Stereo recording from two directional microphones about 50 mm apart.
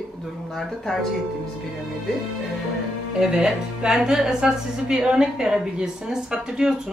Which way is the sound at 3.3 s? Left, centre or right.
Centre.